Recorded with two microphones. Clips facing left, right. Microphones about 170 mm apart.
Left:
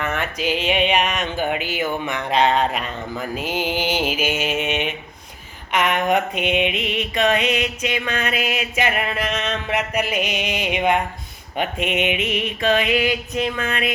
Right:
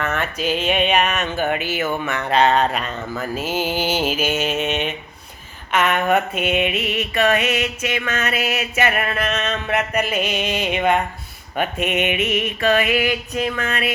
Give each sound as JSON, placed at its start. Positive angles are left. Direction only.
{"t": 0.0, "sound": "mantra", "side_deg": 15}